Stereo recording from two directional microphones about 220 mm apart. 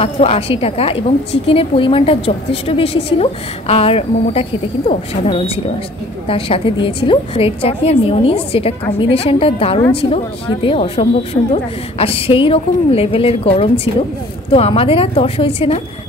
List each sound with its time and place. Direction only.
0.0 s a woman's voice: 25° left (ahead or behind)